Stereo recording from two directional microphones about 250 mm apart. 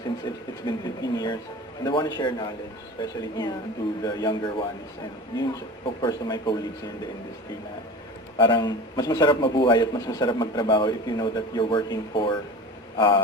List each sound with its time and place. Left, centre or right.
0.6 s a man's voice: centre
8.4 s a man's voice: centre